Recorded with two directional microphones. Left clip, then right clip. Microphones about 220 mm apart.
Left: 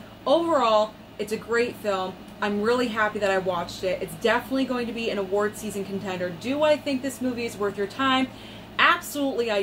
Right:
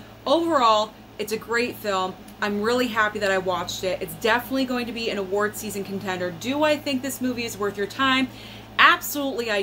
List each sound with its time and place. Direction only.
0.2 s a woman's voice: 15° right (ahead or behind)